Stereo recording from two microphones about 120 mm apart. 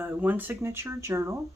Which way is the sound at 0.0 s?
15° right (ahead or behind).